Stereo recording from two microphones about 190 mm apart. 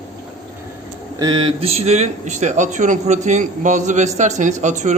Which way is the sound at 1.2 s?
25° right (ahead or behind).